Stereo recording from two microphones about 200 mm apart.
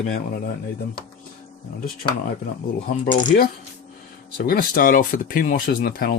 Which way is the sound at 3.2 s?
45° left (ahead or behind).